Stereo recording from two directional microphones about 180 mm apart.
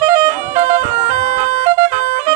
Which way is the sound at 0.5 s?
40° right (ahead or behind).